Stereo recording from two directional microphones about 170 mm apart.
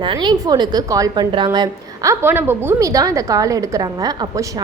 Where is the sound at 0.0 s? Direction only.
30° right (ahead or behind).